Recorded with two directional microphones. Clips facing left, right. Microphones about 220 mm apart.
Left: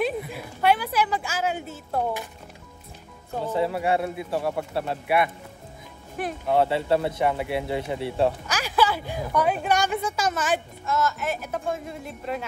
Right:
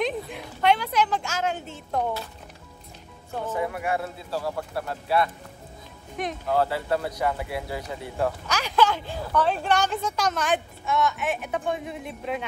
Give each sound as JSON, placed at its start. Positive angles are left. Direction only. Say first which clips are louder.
{"t": 0.0, "sound": "a woman's voice", "louder": "left 1 dB", "side_deg": 5}
{"t": 3.5, "sound": "a man's voice", "louder": "left 4 dB", "side_deg": 30}
{"t": 6.2, "sound": "speech", "louder": "even", "side_deg": 5}
{"t": 6.5, "sound": "a man's voice", "louder": "left 3 dB", "side_deg": 25}
{"t": 8.5, "sound": "speech", "louder": "right 1 dB", "side_deg": 10}